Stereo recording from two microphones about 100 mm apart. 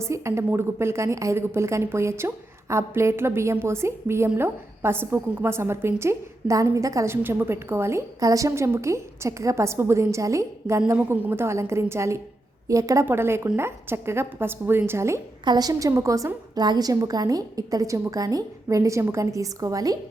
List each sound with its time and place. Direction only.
0.0 s a woman's voice: 30° right (ahead or behind)
13.1 s a woman's voice: 25° right (ahead or behind)
15.4 s a woman's voice: 40° right (ahead or behind)